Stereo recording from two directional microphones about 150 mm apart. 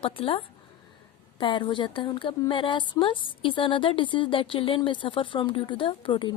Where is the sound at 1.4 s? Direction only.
35° left (ahead or behind).